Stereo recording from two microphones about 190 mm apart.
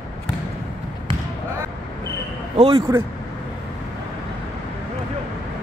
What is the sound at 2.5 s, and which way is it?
Speech, 25° right (ahead or behind).